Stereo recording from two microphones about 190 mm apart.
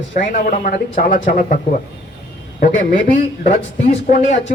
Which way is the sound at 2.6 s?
45° left (ahead or behind).